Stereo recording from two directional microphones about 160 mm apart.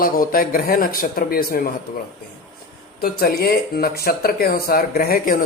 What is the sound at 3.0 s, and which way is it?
Speech, 70° left (ahead or behind).